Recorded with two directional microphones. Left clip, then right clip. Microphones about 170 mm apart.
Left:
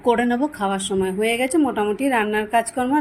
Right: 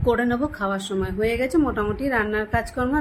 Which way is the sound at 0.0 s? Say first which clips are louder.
Left 3 dB; 10° left (ahead or behind).